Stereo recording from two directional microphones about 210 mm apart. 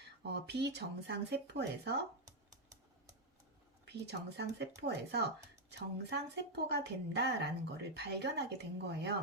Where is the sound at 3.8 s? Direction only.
50° right (ahead or behind).